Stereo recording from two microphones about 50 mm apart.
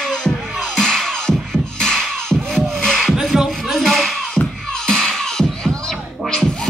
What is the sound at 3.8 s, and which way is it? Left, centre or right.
Music, centre.